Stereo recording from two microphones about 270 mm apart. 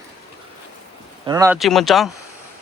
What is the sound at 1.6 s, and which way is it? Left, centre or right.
Speech, centre.